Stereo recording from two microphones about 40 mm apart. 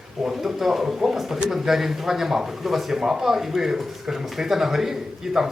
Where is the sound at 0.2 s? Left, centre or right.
Centre.